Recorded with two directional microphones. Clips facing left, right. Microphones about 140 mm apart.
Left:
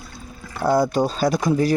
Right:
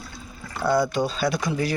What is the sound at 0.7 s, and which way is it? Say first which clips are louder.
Speech: left 3 dB; 45° left (ahead or behind).